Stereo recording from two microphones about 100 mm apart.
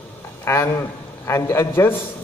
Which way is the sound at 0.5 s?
25° left (ahead or behind).